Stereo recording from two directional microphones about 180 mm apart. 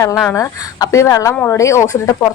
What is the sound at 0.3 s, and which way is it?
A woman's voice, 15° left (ahead or behind).